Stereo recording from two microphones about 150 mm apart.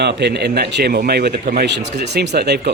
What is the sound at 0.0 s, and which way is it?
Speech, 90° right.